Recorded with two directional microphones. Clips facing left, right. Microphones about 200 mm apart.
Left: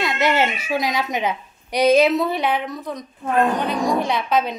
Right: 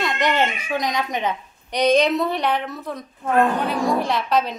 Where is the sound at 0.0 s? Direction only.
5° left (ahead or behind).